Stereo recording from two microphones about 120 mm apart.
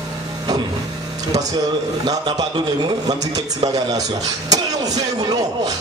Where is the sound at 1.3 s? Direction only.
30° right (ahead or behind).